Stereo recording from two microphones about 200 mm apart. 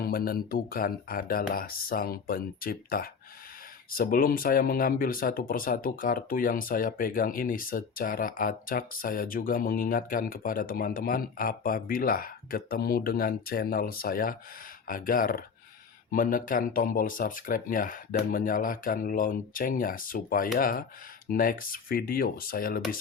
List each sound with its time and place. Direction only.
0.0 s speech: 45° left (ahead or behind)